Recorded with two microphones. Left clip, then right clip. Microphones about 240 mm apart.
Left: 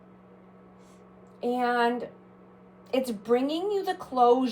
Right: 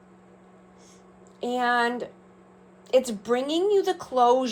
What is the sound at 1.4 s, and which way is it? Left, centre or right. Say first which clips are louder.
Speech: right 2 dB; right.